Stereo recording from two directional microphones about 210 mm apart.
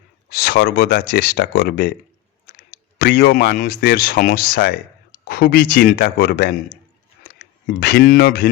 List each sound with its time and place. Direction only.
0.3 s speech: 50° left (ahead or behind)
3.0 s speech: 50° left (ahead or behind)
7.8 s speech: 50° left (ahead or behind)